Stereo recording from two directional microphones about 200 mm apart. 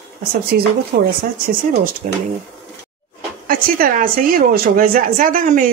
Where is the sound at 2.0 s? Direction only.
40° right (ahead or behind).